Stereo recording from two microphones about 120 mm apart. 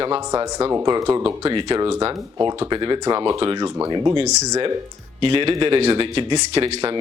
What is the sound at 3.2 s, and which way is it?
Speech, 35° right (ahead or behind).